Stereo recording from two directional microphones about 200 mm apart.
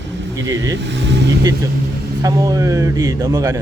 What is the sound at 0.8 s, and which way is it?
Speech, 65° right (ahead or behind).